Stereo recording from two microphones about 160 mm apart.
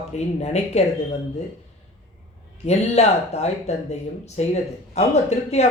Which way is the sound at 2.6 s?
45° left (ahead or behind).